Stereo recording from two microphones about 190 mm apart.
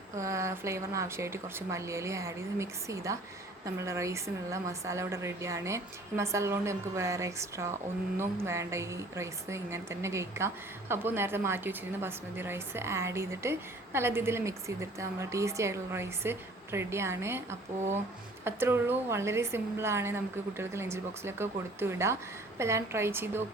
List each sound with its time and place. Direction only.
0.2 s a woman's voice: 15° right (ahead or behind)